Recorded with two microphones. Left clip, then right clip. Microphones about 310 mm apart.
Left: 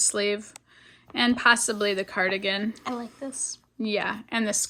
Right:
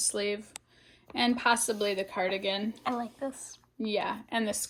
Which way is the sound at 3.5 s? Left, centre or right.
Centre.